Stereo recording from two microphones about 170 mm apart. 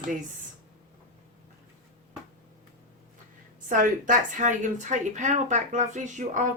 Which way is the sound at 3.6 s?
55° right (ahead or behind).